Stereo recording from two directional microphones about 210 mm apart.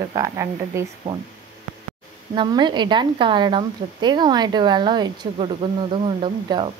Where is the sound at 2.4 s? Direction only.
20° right (ahead or behind).